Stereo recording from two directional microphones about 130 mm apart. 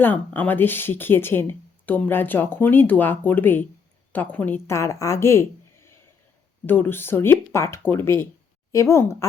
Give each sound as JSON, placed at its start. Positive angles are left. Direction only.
{"t": 0.0, "sound": "a woman's voice", "side_deg": 15}